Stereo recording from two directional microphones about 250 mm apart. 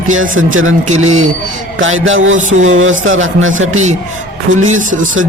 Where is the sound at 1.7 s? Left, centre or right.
Right.